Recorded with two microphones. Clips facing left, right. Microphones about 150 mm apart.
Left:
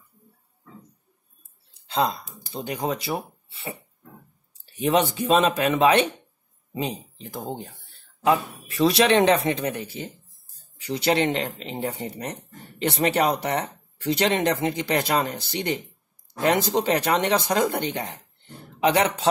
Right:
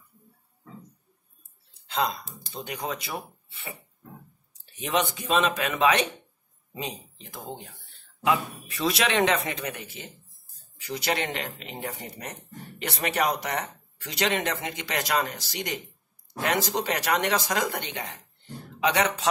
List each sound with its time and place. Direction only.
1.9 s speech: 30° left (ahead or behind)
4.7 s speech: 35° left (ahead or behind)